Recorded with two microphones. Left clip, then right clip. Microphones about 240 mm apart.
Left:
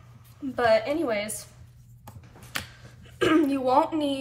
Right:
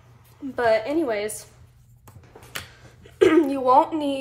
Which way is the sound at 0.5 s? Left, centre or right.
Right.